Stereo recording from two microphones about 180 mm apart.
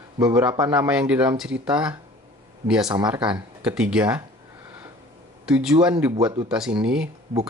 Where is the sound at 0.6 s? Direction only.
5° right (ahead or behind).